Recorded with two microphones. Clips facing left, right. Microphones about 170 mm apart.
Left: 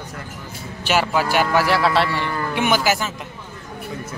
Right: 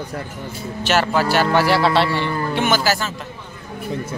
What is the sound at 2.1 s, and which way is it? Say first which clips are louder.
Speech: right 3 dB; 30° right (ahead or behind).